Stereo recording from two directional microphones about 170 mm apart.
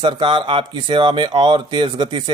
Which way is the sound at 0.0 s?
25° right (ahead or behind).